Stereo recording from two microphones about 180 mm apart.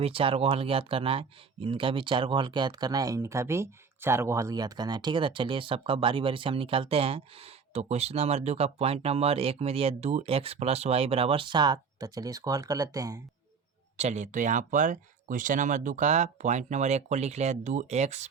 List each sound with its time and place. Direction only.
0.0 s speech: 30° right (ahead or behind)
13.9 s speech: 40° right (ahead or behind)